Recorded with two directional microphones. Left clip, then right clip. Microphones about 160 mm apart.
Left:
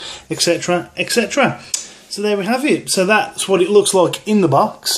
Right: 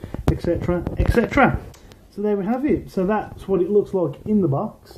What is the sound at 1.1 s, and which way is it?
Speech, 5° left (ahead or behind).